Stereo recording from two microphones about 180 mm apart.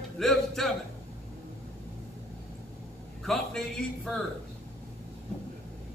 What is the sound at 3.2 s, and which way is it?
Speech, centre (ahead or behind).